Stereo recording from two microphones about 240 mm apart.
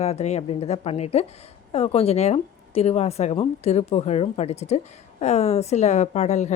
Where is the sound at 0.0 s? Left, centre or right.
Left.